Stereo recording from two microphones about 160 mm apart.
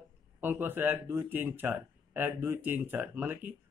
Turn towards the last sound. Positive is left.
turn(degrees=-10)  # may be behind; listen again after turning